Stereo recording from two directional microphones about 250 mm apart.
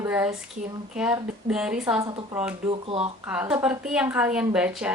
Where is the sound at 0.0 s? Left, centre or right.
Centre.